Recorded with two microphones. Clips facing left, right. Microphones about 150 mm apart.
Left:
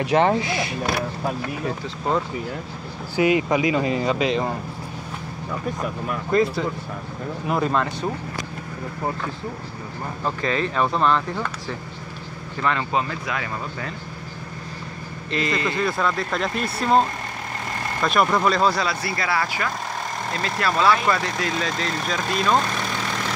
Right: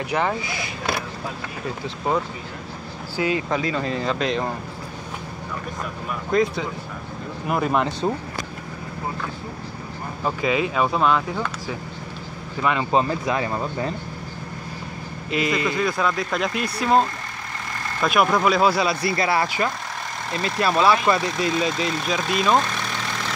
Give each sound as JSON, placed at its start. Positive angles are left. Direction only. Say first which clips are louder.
{"t": 0.0, "sound": "speech", "louder": "left 5 dB", "side_deg": 25}
{"t": 1.7, "sound": "speech", "louder": "right 1 dB", "side_deg": 0}
{"t": 3.2, "sound": "speech", "louder": "left 4 dB", "side_deg": 15}
{"t": 6.3, "sound": "speech", "louder": "left 1 dB", "side_deg": 5}
{"t": 7.7, "sound": "speech", "louder": "right 2 dB", "side_deg": -20}
{"t": 10.2, "sound": "speech", "louder": "right 2 dB", "side_deg": -10}
{"t": 12.9, "sound": "speech", "louder": "right 4 dB", "side_deg": -30}
{"t": 15.3, "sound": "speech", "louder": "right 1 dB", "side_deg": -10}
{"t": 15.8, "sound": "speech", "louder": "even", "side_deg": 0}
{"t": 18.0, "sound": "speech", "louder": "right 1 dB", "side_deg": -5}